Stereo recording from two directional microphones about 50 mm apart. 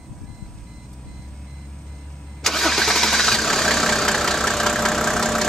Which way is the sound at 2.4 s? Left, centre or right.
Centre.